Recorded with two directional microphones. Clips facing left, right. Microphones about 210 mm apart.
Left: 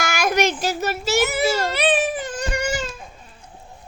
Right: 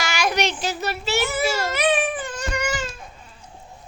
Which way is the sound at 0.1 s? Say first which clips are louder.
Left 3 dB; 50° left (ahead or behind).